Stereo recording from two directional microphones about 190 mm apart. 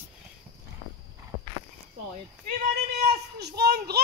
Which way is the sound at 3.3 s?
60° right (ahead or behind).